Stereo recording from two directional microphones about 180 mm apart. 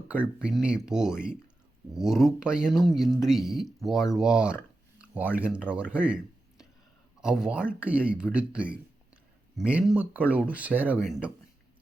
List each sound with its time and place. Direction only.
0.1 s speech: 5° right (ahead or behind)
4.9 s a sound: 10° right (ahead or behind)
5.5 s speech: 5° right (ahead or behind)
7.2 s speech: 5° right (ahead or behind)